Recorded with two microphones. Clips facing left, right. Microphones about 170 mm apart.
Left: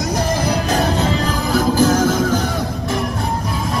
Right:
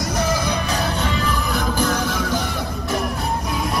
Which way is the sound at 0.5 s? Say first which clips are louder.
Left 5 dB; 35° left (ahead or behind).